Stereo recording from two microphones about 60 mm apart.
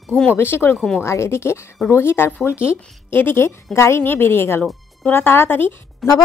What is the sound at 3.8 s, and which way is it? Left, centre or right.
Speech, left.